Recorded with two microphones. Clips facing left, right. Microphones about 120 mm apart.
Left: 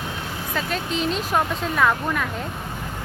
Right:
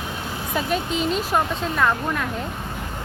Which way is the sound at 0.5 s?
5° right (ahead or behind).